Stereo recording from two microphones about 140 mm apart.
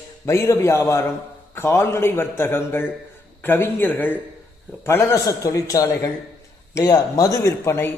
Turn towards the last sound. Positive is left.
turn(degrees=25)  # may be behind; listen again after turning